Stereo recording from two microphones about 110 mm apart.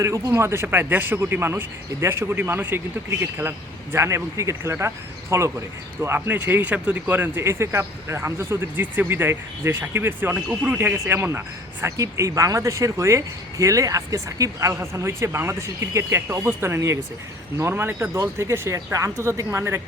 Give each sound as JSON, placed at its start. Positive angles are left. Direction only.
{"t": 0.0, "sound": "speech", "side_deg": -25}